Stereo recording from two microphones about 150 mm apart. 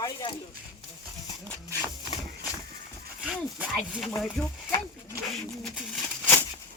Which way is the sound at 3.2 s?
5° right (ahead or behind).